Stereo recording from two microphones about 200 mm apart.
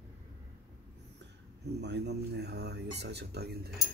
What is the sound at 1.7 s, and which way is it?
Speech, 55° right (ahead or behind).